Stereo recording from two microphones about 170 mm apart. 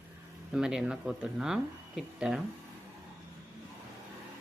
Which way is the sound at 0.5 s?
5° right (ahead or behind).